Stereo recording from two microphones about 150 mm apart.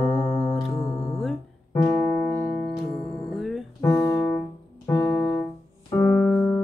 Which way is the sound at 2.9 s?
Centre (ahead or behind).